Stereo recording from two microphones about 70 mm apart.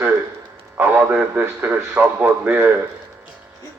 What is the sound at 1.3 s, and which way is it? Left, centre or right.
A man's voice, right.